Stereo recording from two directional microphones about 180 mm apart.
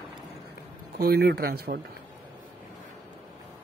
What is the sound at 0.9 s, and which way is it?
Speech, 60° right (ahead or behind).